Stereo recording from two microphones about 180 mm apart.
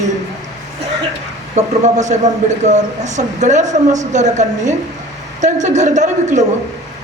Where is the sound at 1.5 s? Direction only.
40° right (ahead or behind).